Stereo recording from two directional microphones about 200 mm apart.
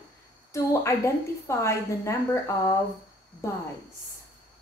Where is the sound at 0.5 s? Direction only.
15° left (ahead or behind).